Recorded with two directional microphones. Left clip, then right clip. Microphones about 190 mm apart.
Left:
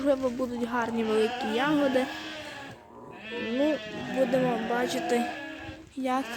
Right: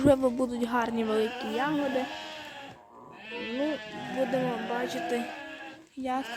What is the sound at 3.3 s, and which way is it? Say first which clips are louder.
Sheep: left 4 dB; 50° right (ahead or behind).